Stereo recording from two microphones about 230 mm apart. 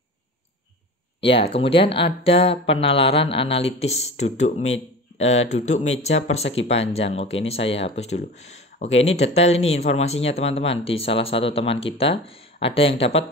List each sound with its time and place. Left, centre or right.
1.2 s speech: left